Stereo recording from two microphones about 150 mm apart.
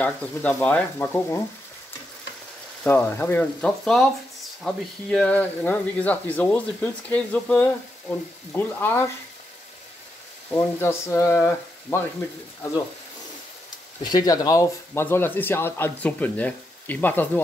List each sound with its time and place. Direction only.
0.0 s speech: 10° left (ahead or behind)
2.8 s speech: 15° left (ahead or behind)
10.5 s speech: 15° left (ahead or behind)
14.0 s speech: 25° left (ahead or behind)